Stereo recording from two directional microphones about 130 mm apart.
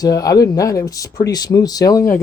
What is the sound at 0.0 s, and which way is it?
Speech, 25° left (ahead or behind).